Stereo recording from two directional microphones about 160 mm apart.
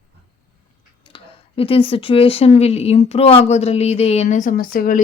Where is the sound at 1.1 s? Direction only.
35° left (ahead or behind).